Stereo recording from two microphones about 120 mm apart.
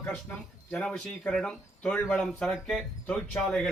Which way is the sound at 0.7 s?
10° left (ahead or behind).